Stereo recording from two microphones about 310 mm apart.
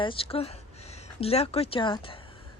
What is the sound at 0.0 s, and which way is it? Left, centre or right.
Speech, centre.